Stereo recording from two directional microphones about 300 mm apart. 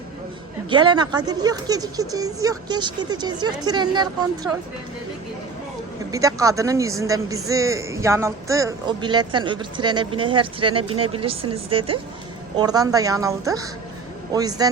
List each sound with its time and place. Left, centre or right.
0.7 s speech: centre
6.1 s speech: centre